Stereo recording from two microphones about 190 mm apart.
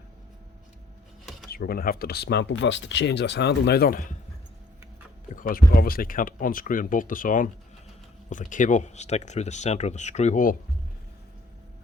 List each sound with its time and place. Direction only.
1.2 s cutlery: centre (ahead or behind)
1.5 s speech: 55° left (ahead or behind)
5.3 s speech: 45° left (ahead or behind)